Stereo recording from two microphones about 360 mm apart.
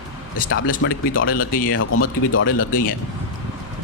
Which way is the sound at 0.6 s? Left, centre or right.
Left.